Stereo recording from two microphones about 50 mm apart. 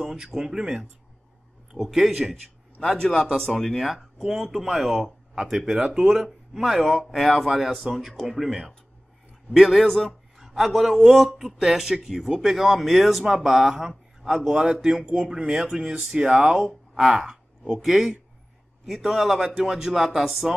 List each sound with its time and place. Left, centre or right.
0.0 s speech: centre
3.3 s speech: centre
5.8 s speech: centre
6.9 s a man's voice: centre
10.4 s speech: centre